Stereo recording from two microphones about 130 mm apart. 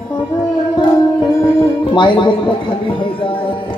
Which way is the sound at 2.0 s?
40° left (ahead or behind).